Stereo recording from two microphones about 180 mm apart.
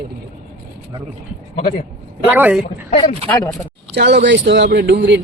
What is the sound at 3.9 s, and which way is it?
Speech, 70° right (ahead or behind).